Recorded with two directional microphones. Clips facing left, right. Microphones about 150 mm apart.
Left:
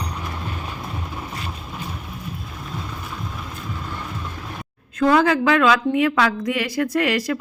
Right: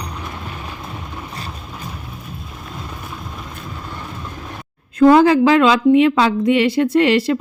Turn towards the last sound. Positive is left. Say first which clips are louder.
# right 6 dB
turn(degrees=-25)  # may be behind; listen again after turning